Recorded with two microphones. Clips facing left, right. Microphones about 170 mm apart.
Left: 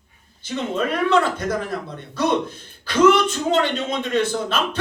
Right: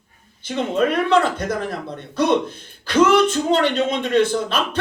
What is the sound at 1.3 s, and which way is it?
Speech, 55° right (ahead or behind).